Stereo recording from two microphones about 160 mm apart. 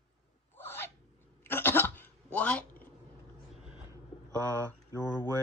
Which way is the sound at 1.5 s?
15° left (ahead or behind).